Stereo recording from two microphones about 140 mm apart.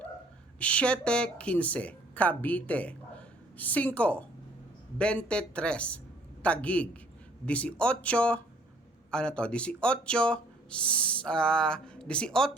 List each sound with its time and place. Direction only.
0.6 s a man's voice: 10° left (ahead or behind)